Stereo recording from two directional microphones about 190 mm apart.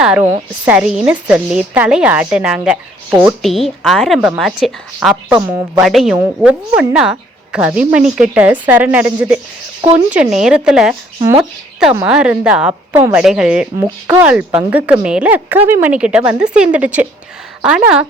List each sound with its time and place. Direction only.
0.0 s a sound: 5° right (ahead or behind)
0.6 s a woman's voice: 5° right (ahead or behind)
11.2 s a woman's voice: 20° right (ahead or behind)
11.9 s a woman's voice: 5° right (ahead or behind)
13.7 s a woman's voice: 15° right (ahead or behind)